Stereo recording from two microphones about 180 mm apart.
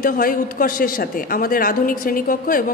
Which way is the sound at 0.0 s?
50° left (ahead or behind).